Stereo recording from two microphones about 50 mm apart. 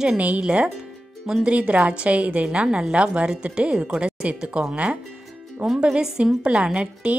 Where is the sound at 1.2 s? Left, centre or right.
Centre.